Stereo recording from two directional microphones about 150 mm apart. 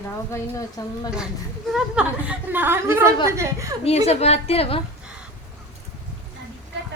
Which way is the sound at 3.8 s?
45° left (ahead or behind).